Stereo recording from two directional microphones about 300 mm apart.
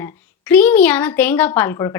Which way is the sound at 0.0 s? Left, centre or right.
Centre.